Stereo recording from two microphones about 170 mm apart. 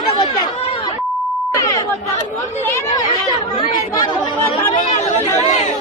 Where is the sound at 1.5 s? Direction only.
20° left (ahead or behind).